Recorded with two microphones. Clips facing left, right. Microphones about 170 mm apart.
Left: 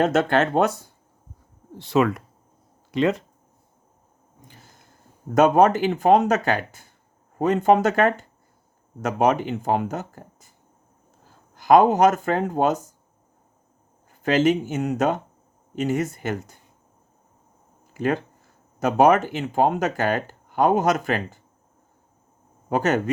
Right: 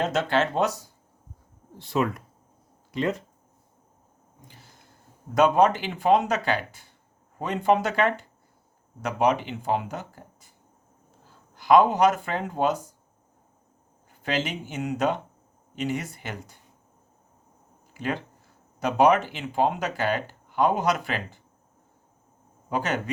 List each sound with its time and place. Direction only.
0.0 s speech: 55° left (ahead or behind)
1.8 s speech: 85° left
5.3 s speech: 45° left (ahead or behind)
14.2 s speech: 45° left (ahead or behind)
17.9 s speech: 45° left (ahead or behind)
22.7 s speech: 45° left (ahead or behind)